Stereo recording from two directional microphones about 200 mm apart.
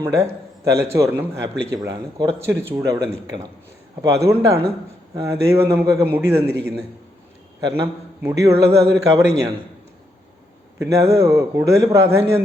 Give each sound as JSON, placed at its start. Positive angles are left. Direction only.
{"t": 0.0, "sound": "a man's voice", "side_deg": -15}
{"t": 7.6, "sound": "a man's voice", "side_deg": -15}
{"t": 10.8, "sound": "a man's voice", "side_deg": -15}